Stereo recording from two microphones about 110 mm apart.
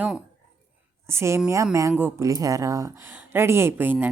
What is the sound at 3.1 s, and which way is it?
Speech, 20° right (ahead or behind).